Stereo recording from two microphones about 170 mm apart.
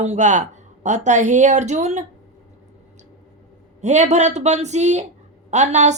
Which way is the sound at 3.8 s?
45° right (ahead or behind).